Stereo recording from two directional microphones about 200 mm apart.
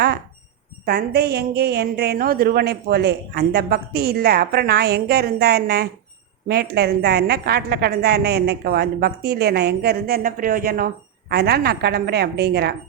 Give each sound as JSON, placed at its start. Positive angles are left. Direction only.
{"t": 0.9, "sound": "a woman's voice", "side_deg": -55}